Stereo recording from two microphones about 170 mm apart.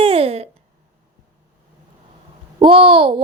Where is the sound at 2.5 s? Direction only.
35° right (ahead or behind).